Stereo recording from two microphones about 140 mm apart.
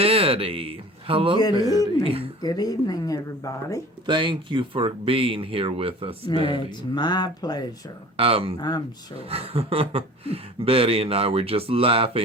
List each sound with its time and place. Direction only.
0.0 s speech: 45° right (ahead or behind)
1.5 s speech: 25° right (ahead or behind)
2.0 s speech: 40° right (ahead or behind)
2.4 s speech: 30° left (ahead or behind)
4.0 s speech: 35° right (ahead or behind)
6.7 s speech: 30° left (ahead or behind)
8.1 s speech: 45° right (ahead or behind)
8.5 s speech: 30° left (ahead or behind)
9.1 s speech: 45° right (ahead or behind)